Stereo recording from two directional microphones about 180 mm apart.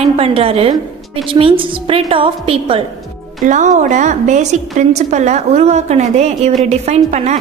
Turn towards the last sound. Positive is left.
turn(degrees=-40)  # may be behind; listen again after turning